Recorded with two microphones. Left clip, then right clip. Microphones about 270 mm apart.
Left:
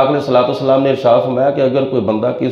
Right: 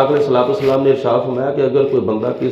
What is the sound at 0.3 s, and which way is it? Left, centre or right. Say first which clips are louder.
A man's voice: left 2 dB; left.